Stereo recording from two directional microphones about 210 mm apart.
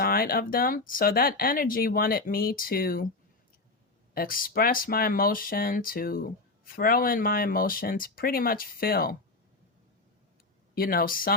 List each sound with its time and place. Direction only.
0.0 s speech: 45° left (ahead or behind)
4.1 s speech: 40° left (ahead or behind)
10.8 s speech: 45° left (ahead or behind)